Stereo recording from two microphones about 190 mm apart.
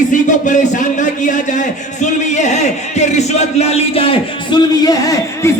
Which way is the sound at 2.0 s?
40° left (ahead or behind).